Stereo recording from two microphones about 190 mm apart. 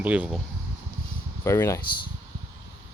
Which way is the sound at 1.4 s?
15° left (ahead or behind).